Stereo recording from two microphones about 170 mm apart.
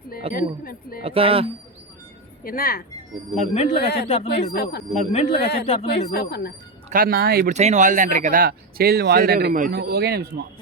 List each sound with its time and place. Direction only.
0.3 s speech: 60° left (ahead or behind)
1.0 s speech: 35° right (ahead or behind)
2.4 s speech: 60° left (ahead or behind)
3.3 s speech: 40° left (ahead or behind)
3.8 s speech: 75° left (ahead or behind)
4.9 s speech: 40° left (ahead or behind)
5.9 s speech: 70° left (ahead or behind)
6.9 s speech: 60° right (ahead or behind)
7.5 s speech: 45° right (ahead or behind); by 10.4 s 70° right (ahead or behind)